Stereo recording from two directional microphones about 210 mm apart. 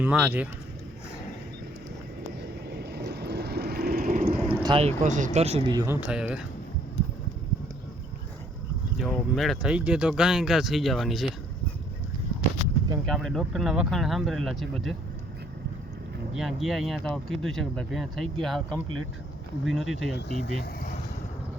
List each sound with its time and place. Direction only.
0.0 s speech: 5° right (ahead or behind)
2.6 s vehicle: 50° right (ahead or behind)
4.4 s speech: 25° right (ahead or behind); by 6.4 s 5° right (ahead or behind)
9.0 s speech: centre (ahead or behind)
13.1 s speech: centre (ahead or behind)
16.3 s speech: centre (ahead or behind)
20.1 s speech: 50° left (ahead or behind)